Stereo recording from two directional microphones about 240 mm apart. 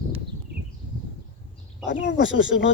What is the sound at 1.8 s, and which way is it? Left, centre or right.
Speech, left.